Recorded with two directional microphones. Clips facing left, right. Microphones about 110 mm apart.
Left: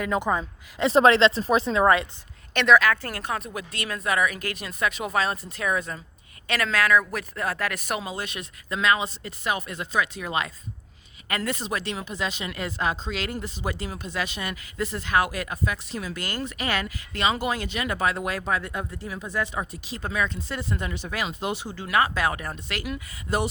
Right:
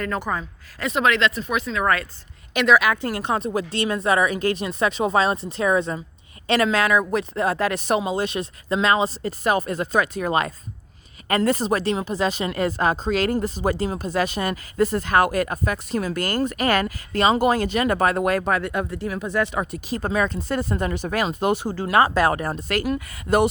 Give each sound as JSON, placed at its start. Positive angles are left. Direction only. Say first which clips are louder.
{"t": 0.0, "sound": "speech", "louder": "left 1 dB", "side_deg": 15}
{"t": 0.9, "sound": "speech", "louder": "left 3 dB", "side_deg": 30}
{"t": 2.5, "sound": "speech", "louder": "right 1 dB", "side_deg": -5}
{"t": 19.9, "sound": "speech", "louder": "right 6 dB", "side_deg": -40}
{"t": 21.8, "sound": "speech", "louder": "right 5 dB", "side_deg": -35}